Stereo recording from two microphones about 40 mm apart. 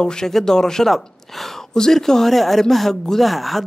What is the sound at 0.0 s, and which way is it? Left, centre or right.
A woman's voice, centre.